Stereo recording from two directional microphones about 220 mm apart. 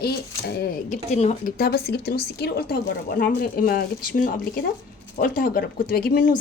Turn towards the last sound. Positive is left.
turn(degrees=35)  # may be behind; listen again after turning